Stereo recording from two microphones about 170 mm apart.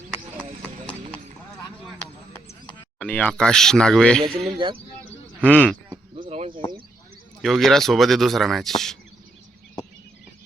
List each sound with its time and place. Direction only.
2.6 s a man's voice: 10° left (ahead or behind)
4.5 s speech: 30° right (ahead or behind)
5.4 s speech: 5° left (ahead or behind)
6.1 s a sound: 35° right (ahead or behind)
7.4 s a man's voice: centre (ahead or behind)